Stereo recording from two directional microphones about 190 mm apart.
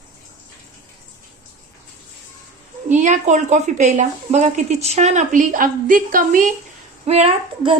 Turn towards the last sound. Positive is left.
turn(degrees=-35)  # may be behind; listen again after turning